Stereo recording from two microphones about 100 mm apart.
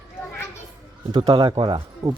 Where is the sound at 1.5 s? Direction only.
65° right (ahead or behind).